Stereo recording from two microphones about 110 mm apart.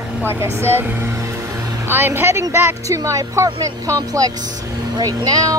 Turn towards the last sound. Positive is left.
turn(degrees=-35)  # may be behind; listen again after turning